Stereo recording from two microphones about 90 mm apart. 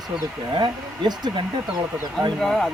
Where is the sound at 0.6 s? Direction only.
50° right (ahead or behind).